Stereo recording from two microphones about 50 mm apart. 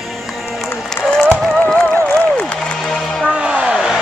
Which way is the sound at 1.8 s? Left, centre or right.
Left.